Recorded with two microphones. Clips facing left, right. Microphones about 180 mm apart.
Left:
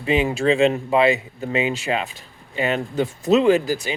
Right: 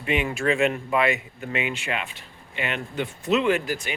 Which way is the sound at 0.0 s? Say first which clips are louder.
Left 5 dB; 30° left (ahead or behind).